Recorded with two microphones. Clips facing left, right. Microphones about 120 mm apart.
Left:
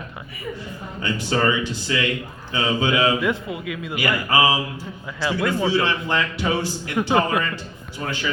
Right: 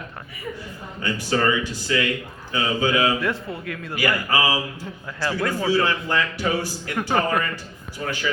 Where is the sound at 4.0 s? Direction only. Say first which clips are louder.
Left 2 dB; 25° left (ahead or behind).